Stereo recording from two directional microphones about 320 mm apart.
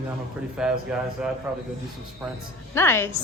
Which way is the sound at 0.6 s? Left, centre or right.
Centre.